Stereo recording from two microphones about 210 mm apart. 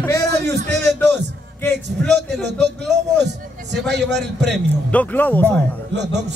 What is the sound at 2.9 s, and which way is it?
A man's voice, 55° right (ahead or behind).